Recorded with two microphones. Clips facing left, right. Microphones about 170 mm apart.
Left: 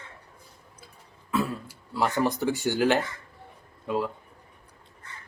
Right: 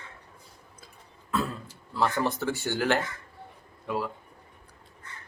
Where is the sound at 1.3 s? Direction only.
10° left (ahead or behind).